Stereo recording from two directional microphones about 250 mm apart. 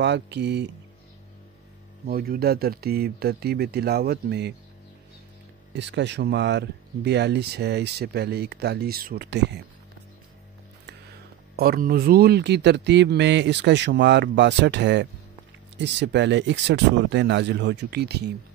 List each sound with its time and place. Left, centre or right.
0.0 s speech: right
2.0 s speech: right
5.8 s speech: right
11.5 s speech: right